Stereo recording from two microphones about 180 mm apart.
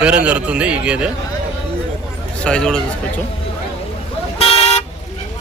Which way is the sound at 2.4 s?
5° left (ahead or behind).